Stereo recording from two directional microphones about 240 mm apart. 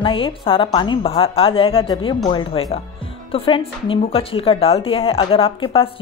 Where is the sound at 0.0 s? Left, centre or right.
Left.